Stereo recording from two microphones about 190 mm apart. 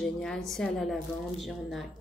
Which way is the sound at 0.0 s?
5° left (ahead or behind).